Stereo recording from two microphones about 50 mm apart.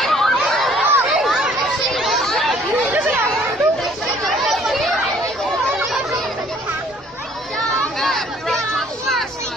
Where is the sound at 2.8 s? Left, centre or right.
Right.